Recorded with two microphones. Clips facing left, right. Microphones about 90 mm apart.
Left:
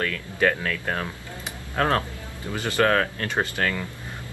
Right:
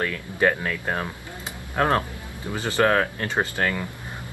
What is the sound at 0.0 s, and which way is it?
Speech, 20° right (ahead or behind).